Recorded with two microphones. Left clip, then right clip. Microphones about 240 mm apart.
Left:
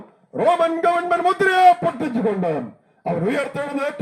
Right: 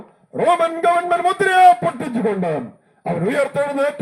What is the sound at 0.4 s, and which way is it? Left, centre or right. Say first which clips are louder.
A man's voice: right 1 dB; centre.